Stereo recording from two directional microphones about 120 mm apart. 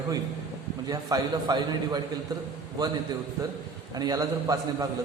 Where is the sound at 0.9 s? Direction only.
35° right (ahead or behind).